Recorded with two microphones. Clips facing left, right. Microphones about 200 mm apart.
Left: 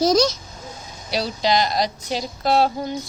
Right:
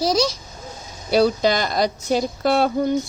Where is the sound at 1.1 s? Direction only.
50° right (ahead or behind).